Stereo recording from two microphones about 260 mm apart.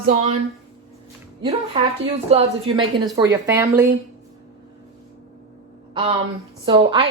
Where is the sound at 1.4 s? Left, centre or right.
Right.